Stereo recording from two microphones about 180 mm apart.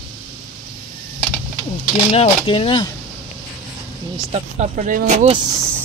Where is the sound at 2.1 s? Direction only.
30° left (ahead or behind).